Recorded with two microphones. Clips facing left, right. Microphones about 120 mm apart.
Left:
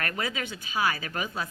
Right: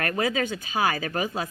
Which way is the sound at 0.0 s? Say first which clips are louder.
Right 7 dB; 45° right (ahead or behind).